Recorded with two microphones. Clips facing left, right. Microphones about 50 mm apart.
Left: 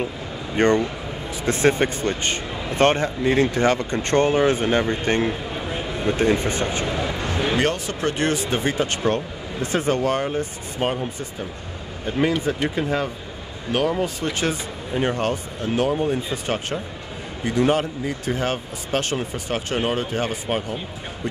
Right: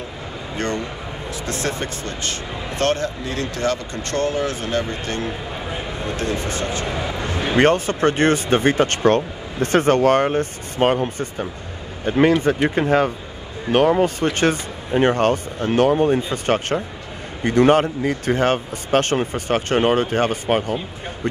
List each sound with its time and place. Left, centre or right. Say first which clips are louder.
0.6 s speech: left 7 dB; left
6.9 s a sound: even; centre
7.5 s speech: right 6 dB; right